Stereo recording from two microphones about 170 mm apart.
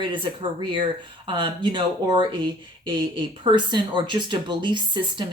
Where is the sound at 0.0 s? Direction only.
30° right (ahead or behind).